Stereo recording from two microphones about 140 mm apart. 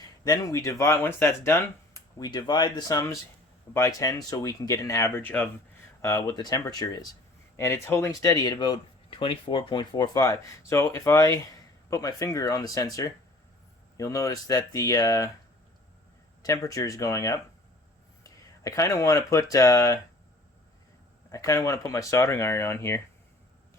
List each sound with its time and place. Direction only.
0.3 s speech: 25° left (ahead or behind)
16.4 s speech: 25° left (ahead or behind)
21.2 s speech: 20° left (ahead or behind)